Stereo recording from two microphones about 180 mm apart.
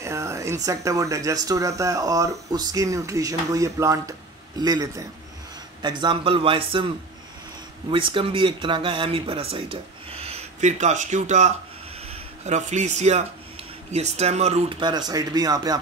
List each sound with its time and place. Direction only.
0.0 s speech: 15° right (ahead or behind)
7.9 s a man's voice: 30° right (ahead or behind)